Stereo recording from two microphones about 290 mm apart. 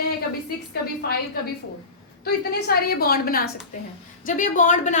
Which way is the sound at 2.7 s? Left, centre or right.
Left.